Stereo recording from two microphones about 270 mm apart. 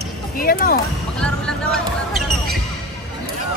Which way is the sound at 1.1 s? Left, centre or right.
Centre.